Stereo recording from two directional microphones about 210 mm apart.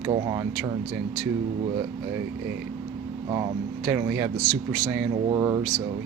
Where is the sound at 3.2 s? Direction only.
20° right (ahead or behind).